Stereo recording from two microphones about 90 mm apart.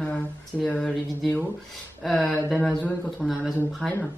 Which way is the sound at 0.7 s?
10° left (ahead or behind).